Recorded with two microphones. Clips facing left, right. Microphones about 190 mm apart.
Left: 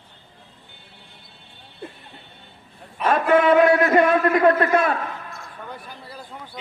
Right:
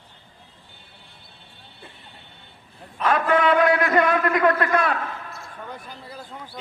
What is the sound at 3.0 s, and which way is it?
A man's voice, 25° left (ahead or behind).